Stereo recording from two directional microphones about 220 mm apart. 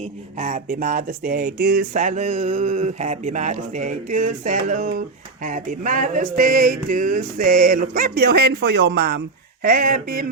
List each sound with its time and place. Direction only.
0.0 s speech: 35° right (ahead or behind)